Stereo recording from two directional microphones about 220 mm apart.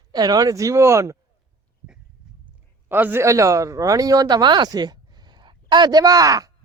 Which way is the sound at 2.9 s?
10° right (ahead or behind).